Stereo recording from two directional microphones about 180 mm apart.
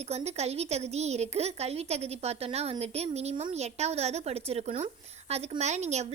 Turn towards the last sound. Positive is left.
turn(degrees=-40)  # may be behind; listen again after turning